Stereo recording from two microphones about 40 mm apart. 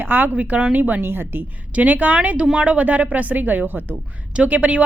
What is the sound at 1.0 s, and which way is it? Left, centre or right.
Speech, right.